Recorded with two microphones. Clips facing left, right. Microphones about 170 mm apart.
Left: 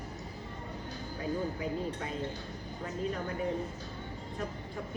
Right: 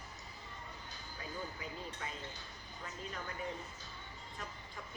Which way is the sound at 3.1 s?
45° left (ahead or behind).